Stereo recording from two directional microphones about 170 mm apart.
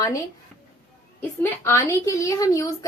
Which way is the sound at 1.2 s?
10° left (ahead or behind).